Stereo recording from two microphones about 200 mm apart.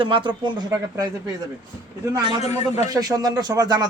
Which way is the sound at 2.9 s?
20° right (ahead or behind).